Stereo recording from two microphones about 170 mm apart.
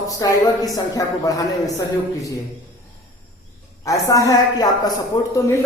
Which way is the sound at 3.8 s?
20° left (ahead or behind).